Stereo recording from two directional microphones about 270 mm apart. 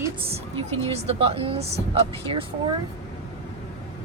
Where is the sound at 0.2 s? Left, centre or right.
Right.